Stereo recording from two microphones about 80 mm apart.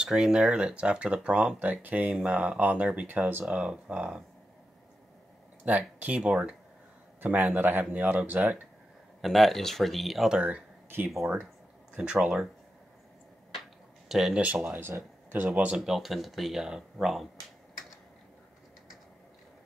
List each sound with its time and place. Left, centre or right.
0.0 s speech: centre
5.7 s speech: centre
9.2 s speech: centre
11.9 s speech: centre
14.0 s speech: centre
14.4 s speech: centre
15.8 s speech: centre